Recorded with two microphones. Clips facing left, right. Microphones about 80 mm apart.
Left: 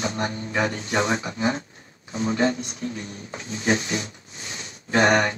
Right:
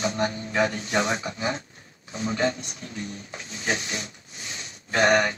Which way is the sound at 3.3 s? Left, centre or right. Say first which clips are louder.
Left 6 dB; left.